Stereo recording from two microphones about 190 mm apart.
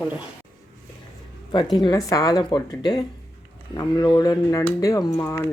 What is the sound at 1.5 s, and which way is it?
Speech, 20° left (ahead or behind).